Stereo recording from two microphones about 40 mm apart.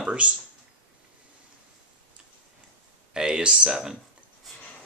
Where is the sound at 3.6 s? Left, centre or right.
Centre.